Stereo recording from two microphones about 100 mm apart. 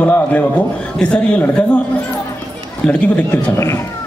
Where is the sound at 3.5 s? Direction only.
30° left (ahead or behind).